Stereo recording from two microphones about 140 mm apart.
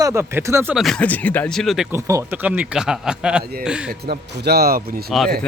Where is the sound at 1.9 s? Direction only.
20° right (ahead or behind).